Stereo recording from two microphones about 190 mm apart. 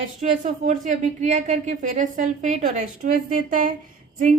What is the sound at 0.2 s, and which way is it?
A woman's voice, 40° right (ahead or behind).